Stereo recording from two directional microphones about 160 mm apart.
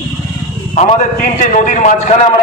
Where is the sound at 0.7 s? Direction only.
55° left (ahead or behind).